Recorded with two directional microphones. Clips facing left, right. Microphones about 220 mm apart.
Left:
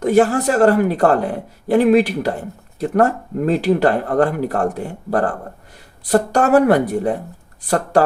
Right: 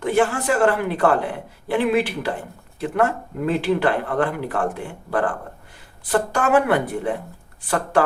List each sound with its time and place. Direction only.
0.0 s speech: 40° left (ahead or behind)